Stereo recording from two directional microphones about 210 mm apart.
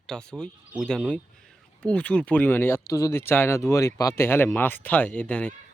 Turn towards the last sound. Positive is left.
turn(degrees=5)  # may be behind; listen again after turning